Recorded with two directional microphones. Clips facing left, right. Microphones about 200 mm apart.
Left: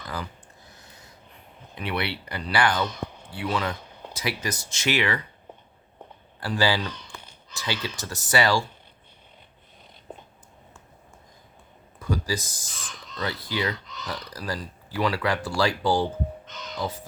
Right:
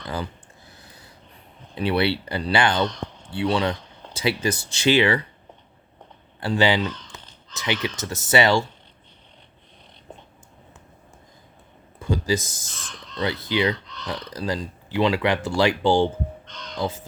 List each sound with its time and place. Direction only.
0.7 s a sound: 30° right (ahead or behind)
1.7 s speech: 30° right (ahead or behind)
2.8 s a sound: 10° left (ahead or behind)
3.2 s speech: 30° right (ahead or behind)
6.4 s speech: 25° right (ahead or behind)
11.9 s speech: 25° right (ahead or behind)
12.7 s speech: 5° left (ahead or behind)
13.2 s speech: 20° right (ahead or behind)
13.7 s speech: centre (ahead or behind)
14.3 s speech: 20° right (ahead or behind)
16.5 s speech: 5° left (ahead or behind)